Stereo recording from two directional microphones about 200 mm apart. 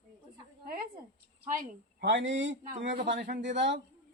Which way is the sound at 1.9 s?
65° right (ahead or behind).